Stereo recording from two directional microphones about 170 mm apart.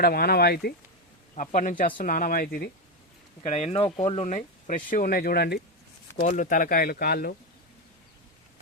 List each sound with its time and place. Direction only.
0.0 s speech: 65° left (ahead or behind)
1.4 s speech: 45° left (ahead or behind)
3.4 s speech: 40° left (ahead or behind); by 5.6 s 70° left (ahead or behind)
6.1 s speech: 50° left (ahead or behind)